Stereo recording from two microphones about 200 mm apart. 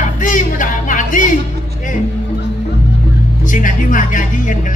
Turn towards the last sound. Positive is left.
turn(degrees=40)  # may be behind; listen again after turning